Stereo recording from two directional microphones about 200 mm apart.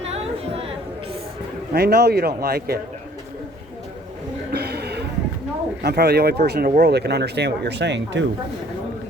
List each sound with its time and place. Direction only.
0.0 s chatter: 30° right (ahead or behind)
1.7 s speech: 55° right (ahead or behind)
4.5 s a sound: 55° right (ahead or behind)
5.8 s speech: 55° right (ahead or behind)